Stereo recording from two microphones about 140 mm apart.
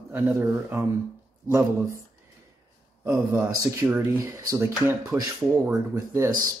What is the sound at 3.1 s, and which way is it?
Speech, 20° right (ahead or behind).